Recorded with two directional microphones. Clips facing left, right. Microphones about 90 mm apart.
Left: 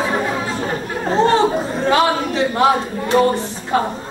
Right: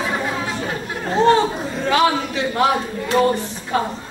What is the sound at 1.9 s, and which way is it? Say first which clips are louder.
A woman's voice: left 1 dB; 35° left (ahead or behind).